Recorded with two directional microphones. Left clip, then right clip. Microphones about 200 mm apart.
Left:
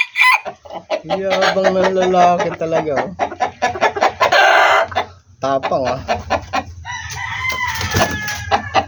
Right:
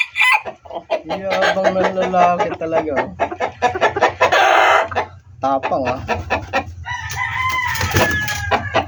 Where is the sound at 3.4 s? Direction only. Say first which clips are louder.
Even; 25° left (ahead or behind).